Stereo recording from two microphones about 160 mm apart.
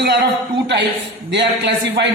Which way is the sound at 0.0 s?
90° right.